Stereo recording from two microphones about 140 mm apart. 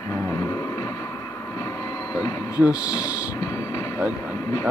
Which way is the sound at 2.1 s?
25° left (ahead or behind).